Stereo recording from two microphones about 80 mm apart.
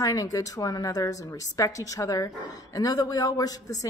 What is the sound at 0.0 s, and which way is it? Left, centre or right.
A woman's voice, left.